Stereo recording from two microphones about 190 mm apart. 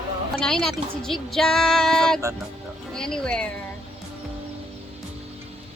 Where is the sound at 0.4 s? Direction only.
Centre (ahead or behind).